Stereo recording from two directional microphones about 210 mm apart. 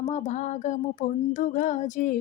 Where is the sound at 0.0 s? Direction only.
35° left (ahead or behind).